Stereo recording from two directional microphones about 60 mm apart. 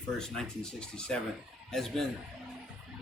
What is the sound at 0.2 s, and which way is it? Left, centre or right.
Speech, centre.